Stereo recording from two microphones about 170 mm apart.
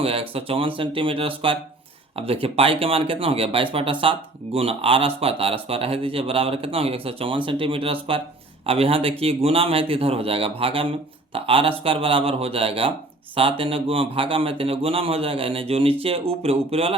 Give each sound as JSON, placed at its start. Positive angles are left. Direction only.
{"t": 0.0, "sound": "speech", "side_deg": -35}